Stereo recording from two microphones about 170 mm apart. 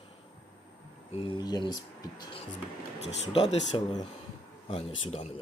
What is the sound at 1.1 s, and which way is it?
Speech, 30° left (ahead or behind).